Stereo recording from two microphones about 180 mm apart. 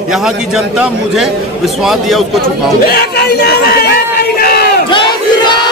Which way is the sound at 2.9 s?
60° left (ahead or behind).